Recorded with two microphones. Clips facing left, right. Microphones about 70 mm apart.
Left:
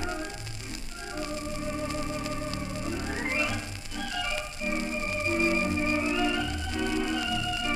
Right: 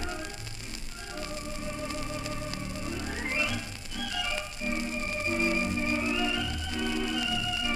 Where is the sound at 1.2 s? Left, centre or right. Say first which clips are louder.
Left 4 dB; centre.